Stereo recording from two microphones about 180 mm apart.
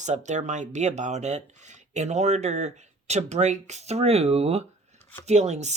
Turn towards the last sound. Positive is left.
turn(degrees=-40)  # may be behind; listen again after turning